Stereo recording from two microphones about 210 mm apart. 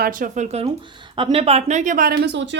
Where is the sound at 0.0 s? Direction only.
40° right (ahead or behind).